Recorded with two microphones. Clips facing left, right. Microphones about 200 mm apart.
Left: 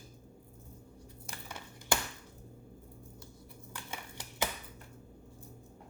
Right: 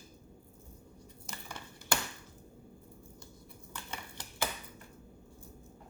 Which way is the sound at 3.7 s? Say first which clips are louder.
Even; 10° left (ahead or behind).